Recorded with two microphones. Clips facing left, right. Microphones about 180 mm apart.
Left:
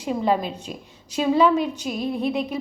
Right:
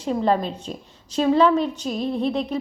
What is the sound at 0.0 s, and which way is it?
A woman's voice, 5° left (ahead or behind).